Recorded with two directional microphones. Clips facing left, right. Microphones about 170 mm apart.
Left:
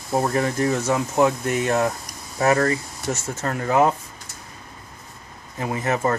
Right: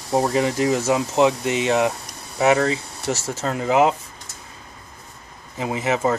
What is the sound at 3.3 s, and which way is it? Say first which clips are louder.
Speech: right 1 dB; 15° right (ahead or behind).